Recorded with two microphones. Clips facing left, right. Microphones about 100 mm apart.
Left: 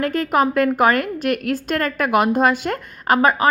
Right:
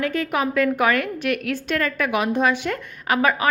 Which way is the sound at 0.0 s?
45° left (ahead or behind).